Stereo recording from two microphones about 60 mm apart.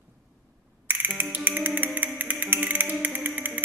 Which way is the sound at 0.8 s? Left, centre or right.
Right.